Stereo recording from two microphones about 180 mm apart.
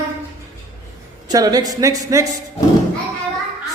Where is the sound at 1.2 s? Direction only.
20° right (ahead or behind).